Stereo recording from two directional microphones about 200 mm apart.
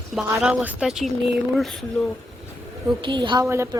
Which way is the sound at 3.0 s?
25° right (ahead or behind).